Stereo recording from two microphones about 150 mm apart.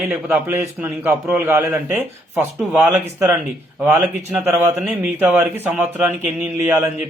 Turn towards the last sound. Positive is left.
turn(degrees=-10)  # may be behind; listen again after turning